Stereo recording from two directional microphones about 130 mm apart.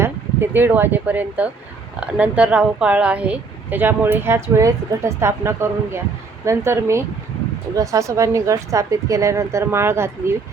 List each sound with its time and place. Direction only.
0.0 s a woman's voice: 15° right (ahead or behind)